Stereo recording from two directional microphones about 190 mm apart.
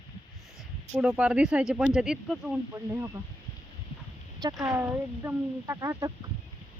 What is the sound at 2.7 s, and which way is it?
Speech, 15° right (ahead or behind).